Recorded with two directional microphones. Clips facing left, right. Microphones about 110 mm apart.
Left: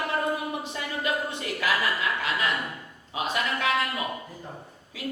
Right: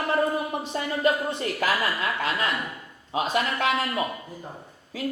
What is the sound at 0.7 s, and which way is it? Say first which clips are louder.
A woman's voice: right 8 dB; 35° right (ahead or behind).